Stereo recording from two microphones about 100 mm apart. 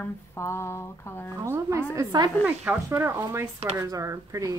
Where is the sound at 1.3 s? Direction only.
30° right (ahead or behind).